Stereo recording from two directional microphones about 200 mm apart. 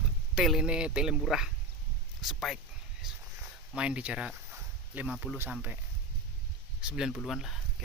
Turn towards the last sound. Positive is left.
turn(degrees=0)  # may be behind; listen again after turning